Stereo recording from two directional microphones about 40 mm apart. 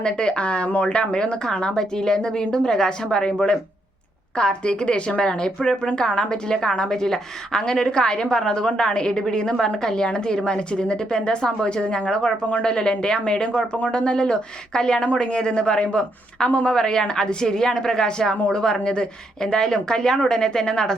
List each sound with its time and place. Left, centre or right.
0.0 s speech: left
4.4 s speech: left